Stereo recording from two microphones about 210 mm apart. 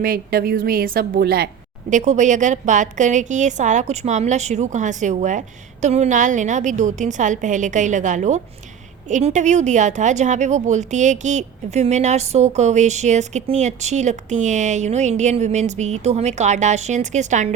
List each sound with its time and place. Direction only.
0.0 s a woman's voice: 45° right (ahead or behind)
1.9 s speech: 35° right (ahead or behind)